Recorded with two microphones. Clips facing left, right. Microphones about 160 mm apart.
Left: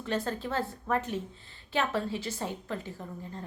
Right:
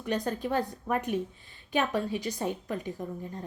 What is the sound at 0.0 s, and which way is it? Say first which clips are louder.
A woman's voice: right 2 dB; 15° right (ahead or behind).